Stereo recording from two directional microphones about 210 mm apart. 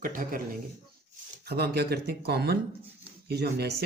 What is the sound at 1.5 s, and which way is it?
Speech, 50° right (ahead or behind).